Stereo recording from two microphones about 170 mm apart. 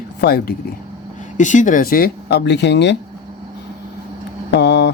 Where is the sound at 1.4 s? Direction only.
50° left (ahead or behind); by 2.9 s 90° left.